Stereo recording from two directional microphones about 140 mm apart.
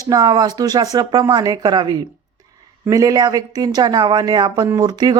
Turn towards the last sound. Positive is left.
turn(degrees=-30)  # may be behind; listen again after turning